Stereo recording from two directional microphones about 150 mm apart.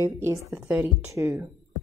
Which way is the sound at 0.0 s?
20° right (ahead or behind).